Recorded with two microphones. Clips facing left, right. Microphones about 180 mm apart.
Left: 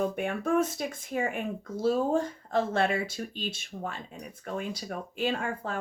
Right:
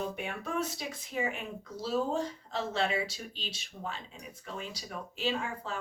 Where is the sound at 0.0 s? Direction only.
50° left (ahead or behind).